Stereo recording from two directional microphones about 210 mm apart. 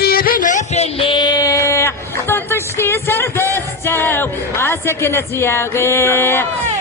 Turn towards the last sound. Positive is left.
turn(degrees=10)  # may be behind; listen again after turning